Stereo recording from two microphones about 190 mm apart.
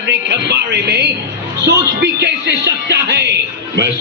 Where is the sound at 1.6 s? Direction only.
60° right (ahead or behind).